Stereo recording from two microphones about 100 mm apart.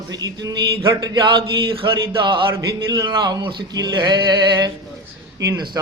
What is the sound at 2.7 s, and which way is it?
Speech, 40° right (ahead or behind).